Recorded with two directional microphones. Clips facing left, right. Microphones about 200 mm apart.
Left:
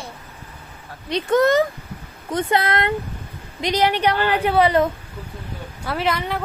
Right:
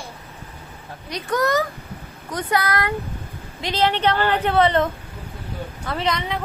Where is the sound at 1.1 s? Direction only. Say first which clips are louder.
Left 5 dB; 25° left (ahead or behind).